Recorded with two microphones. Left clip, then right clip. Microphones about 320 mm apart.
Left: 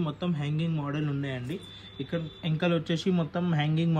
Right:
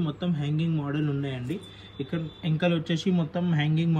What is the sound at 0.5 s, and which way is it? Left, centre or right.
Speech, left.